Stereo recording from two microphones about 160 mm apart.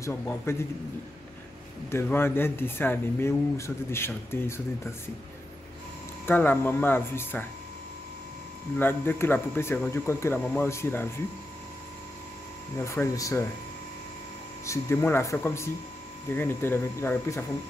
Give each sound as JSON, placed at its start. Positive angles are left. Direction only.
{"t": 0.0, "sound": "speech", "side_deg": 15}
{"t": 1.9, "sound": "speech", "side_deg": 15}
{"t": 6.2, "sound": "speech", "side_deg": 10}
{"t": 8.7, "sound": "speech", "side_deg": 15}
{"t": 12.7, "sound": "speech", "side_deg": 15}
{"t": 14.7, "sound": "speech", "side_deg": 15}